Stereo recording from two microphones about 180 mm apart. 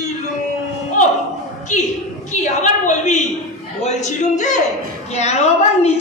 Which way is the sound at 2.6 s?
40° left (ahead or behind).